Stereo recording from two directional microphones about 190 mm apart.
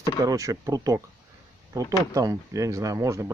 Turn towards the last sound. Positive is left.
turn(degrees=-15)  # may be behind; listen again after turning